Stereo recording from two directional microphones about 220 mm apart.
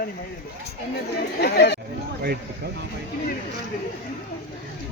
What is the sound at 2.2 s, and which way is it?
Speech, 45° right (ahead or behind).